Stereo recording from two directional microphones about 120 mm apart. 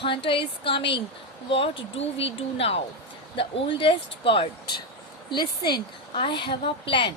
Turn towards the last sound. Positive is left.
turn(degrees=45)  # may be behind; listen again after turning